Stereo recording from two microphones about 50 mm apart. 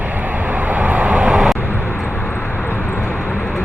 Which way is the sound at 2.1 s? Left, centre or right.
Centre.